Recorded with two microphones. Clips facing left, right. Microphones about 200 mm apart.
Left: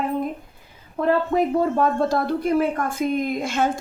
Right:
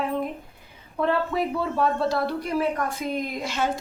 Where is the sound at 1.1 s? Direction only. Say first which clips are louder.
Left 6 dB; 45° left (ahead or behind).